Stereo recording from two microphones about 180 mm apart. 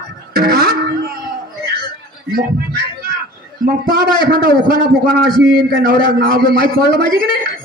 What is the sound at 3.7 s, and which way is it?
A man's voice, 55° right (ahead or behind).